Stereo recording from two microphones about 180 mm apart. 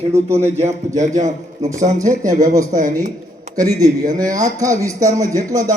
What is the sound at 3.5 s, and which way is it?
Speech, 20° right (ahead or behind).